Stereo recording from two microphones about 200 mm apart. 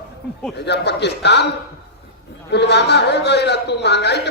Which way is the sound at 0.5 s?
55° left (ahead or behind).